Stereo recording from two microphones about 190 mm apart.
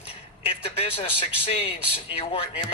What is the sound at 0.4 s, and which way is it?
Speech, 30° left (ahead or behind).